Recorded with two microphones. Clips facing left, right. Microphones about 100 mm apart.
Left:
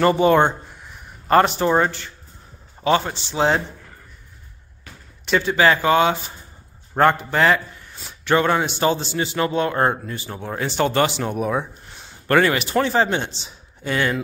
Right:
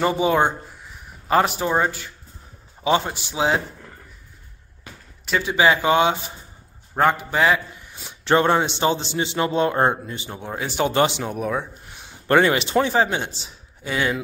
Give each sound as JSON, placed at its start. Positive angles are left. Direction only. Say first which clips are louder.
{"t": 0.0, "sound": "speech", "louder": "left 4 dB", "side_deg": -5}
{"t": 5.2, "sound": "speech", "louder": "left 1 dB", "side_deg": -10}
{"t": 7.0, "sound": "a man's voice", "louder": "left 2 dB", "side_deg": -5}
{"t": 8.1, "sound": "a man's voice", "louder": "right 1 dB", "side_deg": -30}
{"t": 11.2, "sound": "speech", "louder": "left 2 dB", "side_deg": 5}
{"t": 11.9, "sound": "a man's voice", "louder": "even", "side_deg": -15}